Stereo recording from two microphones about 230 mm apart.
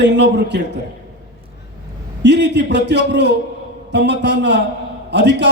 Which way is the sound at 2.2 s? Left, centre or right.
Right.